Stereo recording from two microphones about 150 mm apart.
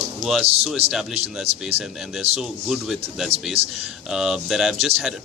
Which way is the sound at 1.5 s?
45° right (ahead or behind).